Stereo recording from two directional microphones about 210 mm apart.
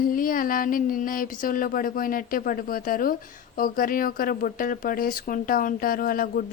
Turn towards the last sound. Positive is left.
turn(degrees=40)  # may be behind; listen again after turning